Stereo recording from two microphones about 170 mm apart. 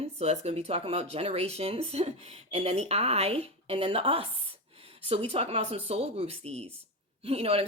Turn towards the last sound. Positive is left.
turn(degrees=-35)  # may be behind; listen again after turning